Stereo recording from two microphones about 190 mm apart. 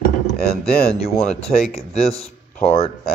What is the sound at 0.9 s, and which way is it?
Speech, 35° left (ahead or behind).